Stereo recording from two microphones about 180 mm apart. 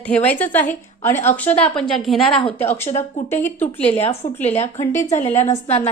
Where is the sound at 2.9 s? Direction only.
40° left (ahead or behind).